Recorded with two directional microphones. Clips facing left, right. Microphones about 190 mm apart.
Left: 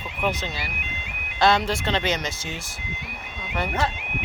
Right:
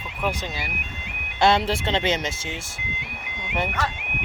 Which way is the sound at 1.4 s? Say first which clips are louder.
Right 1 dB; 25° right (ahead or behind).